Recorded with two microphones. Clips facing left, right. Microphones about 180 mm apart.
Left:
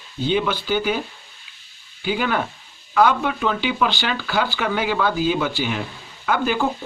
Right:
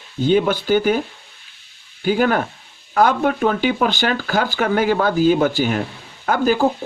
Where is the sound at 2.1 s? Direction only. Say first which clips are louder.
Right 5 dB; 45° right (ahead or behind).